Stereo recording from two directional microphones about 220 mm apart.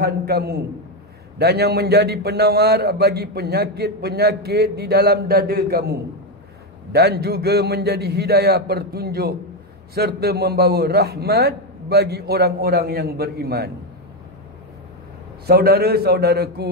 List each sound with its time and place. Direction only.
0.0 s a man's voice: 45° right (ahead or behind)
15.4 s a man's voice: 45° right (ahead or behind)